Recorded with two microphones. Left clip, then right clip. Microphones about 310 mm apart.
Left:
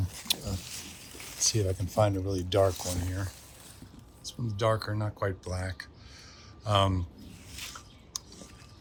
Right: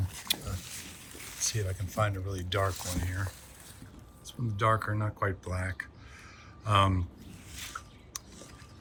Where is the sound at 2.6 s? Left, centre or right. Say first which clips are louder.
Left 6 dB; left.